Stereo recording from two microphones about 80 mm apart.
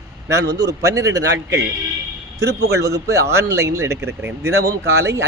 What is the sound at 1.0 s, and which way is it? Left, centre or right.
Speech, right.